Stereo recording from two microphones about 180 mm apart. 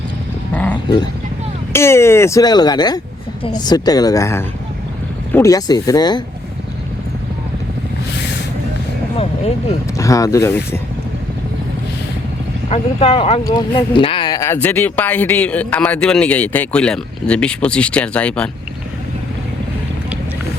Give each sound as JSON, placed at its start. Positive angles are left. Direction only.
{"t": 0.5, "sound": "a sound", "side_deg": 10}
{"t": 1.7, "sound": "speech", "side_deg": 15}
{"t": 9.1, "sound": "speech", "side_deg": 35}
{"t": 10.0, "sound": "speech", "side_deg": 20}
{"t": 12.6, "sound": "speech", "side_deg": 35}